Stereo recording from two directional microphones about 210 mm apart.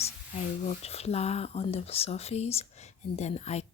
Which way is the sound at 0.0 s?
30° left (ahead or behind).